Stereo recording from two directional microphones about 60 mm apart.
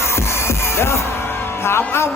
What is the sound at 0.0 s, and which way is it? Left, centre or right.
Music, left.